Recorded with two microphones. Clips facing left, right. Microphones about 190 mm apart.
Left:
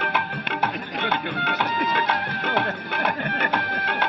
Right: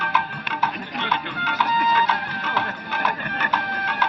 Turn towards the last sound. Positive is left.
turn(degrees=55)  # may be behind; listen again after turning